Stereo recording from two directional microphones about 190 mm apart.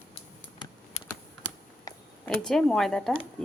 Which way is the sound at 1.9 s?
20° left (ahead or behind).